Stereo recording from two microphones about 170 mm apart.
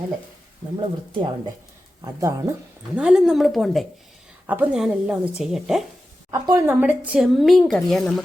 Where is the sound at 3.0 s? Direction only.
5° right (ahead or behind).